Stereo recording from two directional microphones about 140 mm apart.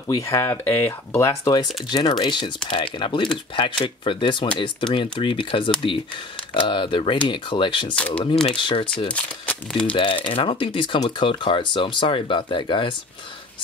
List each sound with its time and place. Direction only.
0.1 s speech: 20° left (ahead or behind); by 7.9 s 35° left (ahead or behind)
7.9 s speech: 10° left (ahead or behind)
8.5 s speech: 40° left (ahead or behind)
9.1 s speech: 5° left (ahead or behind)
9.9 s speech: 35° left (ahead or behind)